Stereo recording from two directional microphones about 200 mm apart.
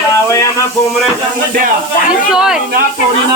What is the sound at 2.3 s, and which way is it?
Speech, 5° right (ahead or behind).